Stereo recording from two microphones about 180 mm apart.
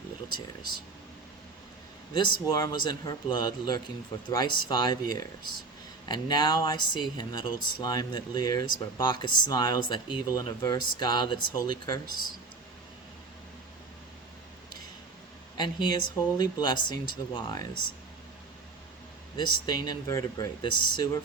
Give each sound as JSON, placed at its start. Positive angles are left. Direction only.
{"t": 2.1, "sound": "speech", "side_deg": 25}
{"t": 15.5, "sound": "speech", "side_deg": 25}
{"t": 19.4, "sound": "speech", "side_deg": 25}